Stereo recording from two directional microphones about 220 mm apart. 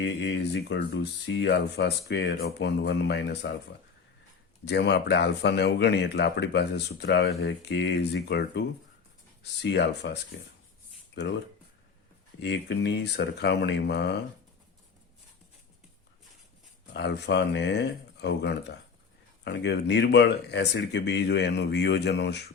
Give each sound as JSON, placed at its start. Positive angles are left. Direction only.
{"t": 0.0, "sound": "speech", "side_deg": 55}
{"t": 4.6, "sound": "speech", "side_deg": 50}
{"t": 11.2, "sound": "speech", "side_deg": 50}
{"t": 12.4, "sound": "speech", "side_deg": 50}
{"t": 16.9, "sound": "speech", "side_deg": 50}